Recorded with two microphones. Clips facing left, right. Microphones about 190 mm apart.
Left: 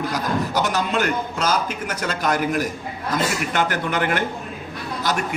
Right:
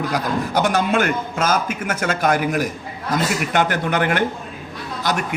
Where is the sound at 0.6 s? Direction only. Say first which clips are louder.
Right 7 dB; 50° right (ahead or behind).